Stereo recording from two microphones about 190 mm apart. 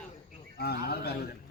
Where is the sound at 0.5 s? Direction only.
55° left (ahead or behind).